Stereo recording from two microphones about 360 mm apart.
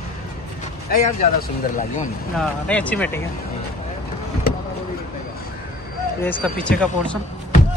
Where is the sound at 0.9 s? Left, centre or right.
Left.